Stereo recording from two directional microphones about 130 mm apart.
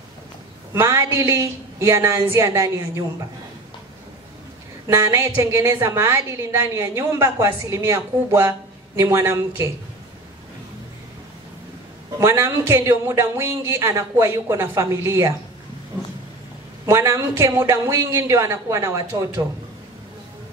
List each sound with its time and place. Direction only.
0.7 s a woman's voice: 20° right (ahead or behind)
4.8 s a woman's voice: 20° right (ahead or behind)
12.2 s a woman's voice: 20° right (ahead or behind)
16.8 s a woman's voice: 20° right (ahead or behind)